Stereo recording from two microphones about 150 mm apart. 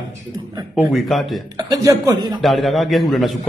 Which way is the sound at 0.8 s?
Centre (ahead or behind).